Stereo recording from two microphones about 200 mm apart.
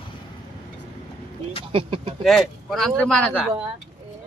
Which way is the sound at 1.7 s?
25° right (ahead or behind).